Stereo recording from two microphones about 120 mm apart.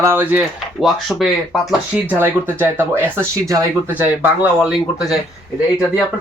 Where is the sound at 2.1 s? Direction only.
15° right (ahead or behind).